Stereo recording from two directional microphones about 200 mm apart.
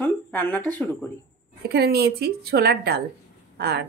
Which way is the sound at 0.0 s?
10° left (ahead or behind).